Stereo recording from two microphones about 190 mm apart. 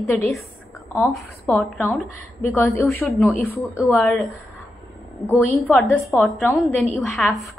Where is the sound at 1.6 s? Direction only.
Centre (ahead or behind).